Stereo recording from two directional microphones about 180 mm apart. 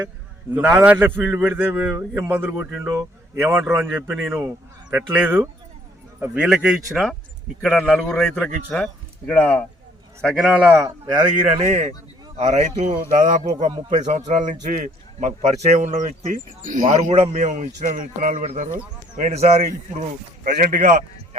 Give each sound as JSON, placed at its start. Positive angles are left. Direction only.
{"t": 0.5, "sound": "a man's voice", "side_deg": -10}
{"t": 10.8, "sound": "a man's voice", "side_deg": -20}
{"t": 11.5, "sound": "speech", "side_deg": -35}